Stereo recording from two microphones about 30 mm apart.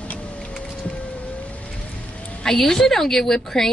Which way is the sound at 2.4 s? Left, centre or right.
Centre.